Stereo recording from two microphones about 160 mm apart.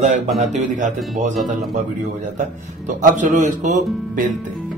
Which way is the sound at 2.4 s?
50° right (ahead or behind).